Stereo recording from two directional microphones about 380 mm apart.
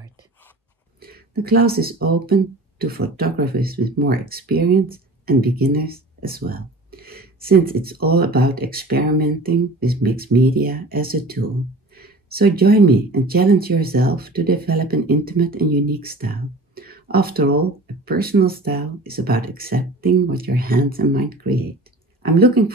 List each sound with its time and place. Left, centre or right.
1.0 s speech: right